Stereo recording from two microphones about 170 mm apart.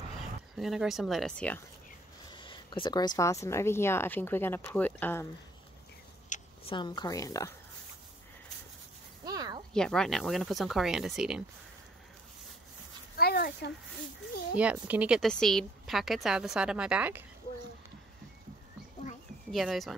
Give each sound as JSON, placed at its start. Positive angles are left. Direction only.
{"t": 0.1, "sound": "speech", "side_deg": 0}
{"t": 2.3, "sound": "speech", "side_deg": 30}
{"t": 6.6, "sound": "a woman's voice", "side_deg": 30}
{"t": 9.2, "sound": "a sound", "side_deg": -20}
{"t": 9.8, "sound": "speech", "side_deg": 5}
{"t": 13.1, "sound": "a sound", "side_deg": 65}
{"t": 14.6, "sound": "speech", "side_deg": -10}
{"t": 19.5, "sound": "speech", "side_deg": 0}